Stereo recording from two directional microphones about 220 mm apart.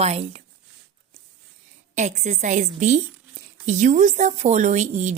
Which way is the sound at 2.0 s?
30° right (ahead or behind).